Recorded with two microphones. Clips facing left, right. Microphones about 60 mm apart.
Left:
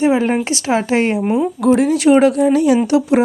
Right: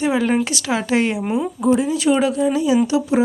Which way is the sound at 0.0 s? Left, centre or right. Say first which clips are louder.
Left 3 dB; left.